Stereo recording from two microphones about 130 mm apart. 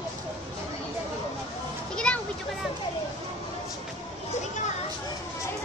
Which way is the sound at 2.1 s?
5° left (ahead or behind).